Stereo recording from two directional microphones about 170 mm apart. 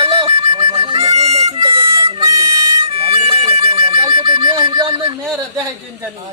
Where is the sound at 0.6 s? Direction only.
25° right (ahead or behind).